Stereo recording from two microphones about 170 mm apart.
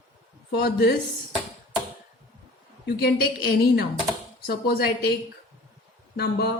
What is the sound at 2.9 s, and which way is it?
A woman's voice, 65° left (ahead or behind).